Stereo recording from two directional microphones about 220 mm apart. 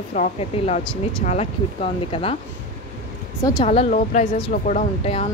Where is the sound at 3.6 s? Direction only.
30° left (ahead or behind).